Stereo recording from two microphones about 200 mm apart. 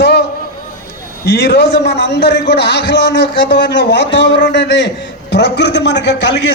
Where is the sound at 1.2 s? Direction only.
55° left (ahead or behind).